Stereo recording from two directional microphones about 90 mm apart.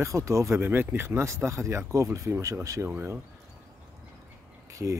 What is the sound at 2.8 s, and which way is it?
Speech, 25° right (ahead or behind).